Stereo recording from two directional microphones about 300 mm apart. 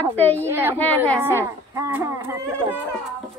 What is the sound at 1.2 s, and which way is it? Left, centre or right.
Speech, centre.